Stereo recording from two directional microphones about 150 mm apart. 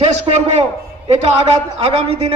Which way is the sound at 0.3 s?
45° right (ahead or behind).